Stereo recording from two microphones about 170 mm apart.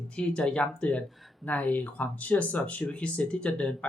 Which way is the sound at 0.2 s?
5° left (ahead or behind).